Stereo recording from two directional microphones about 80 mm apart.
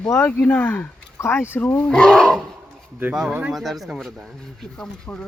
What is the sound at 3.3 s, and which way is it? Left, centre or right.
Speech, centre.